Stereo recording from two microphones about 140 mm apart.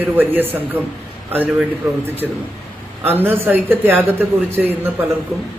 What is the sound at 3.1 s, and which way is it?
Speech, 15° right (ahead or behind).